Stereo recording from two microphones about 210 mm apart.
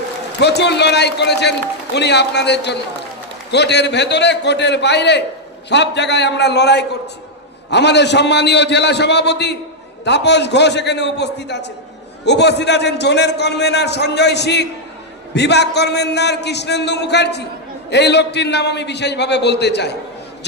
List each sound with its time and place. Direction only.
0.4 s a man's voice: 55° left (ahead or behind)